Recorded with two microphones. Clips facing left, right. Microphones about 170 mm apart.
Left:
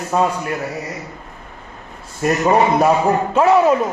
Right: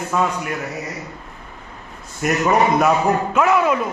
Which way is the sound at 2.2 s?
30° left (ahead or behind).